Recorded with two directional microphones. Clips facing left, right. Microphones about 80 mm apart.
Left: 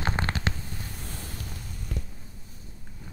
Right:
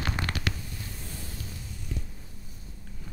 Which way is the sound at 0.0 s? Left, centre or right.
Left.